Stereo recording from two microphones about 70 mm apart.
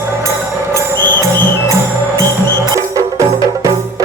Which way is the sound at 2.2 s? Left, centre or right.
Right.